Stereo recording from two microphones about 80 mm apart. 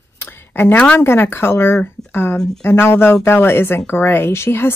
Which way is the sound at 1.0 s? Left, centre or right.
Left.